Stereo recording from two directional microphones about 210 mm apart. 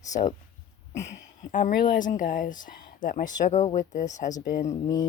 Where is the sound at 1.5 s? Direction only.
40° left (ahead or behind).